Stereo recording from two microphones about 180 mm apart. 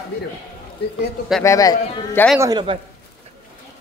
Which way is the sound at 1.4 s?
20° left (ahead or behind).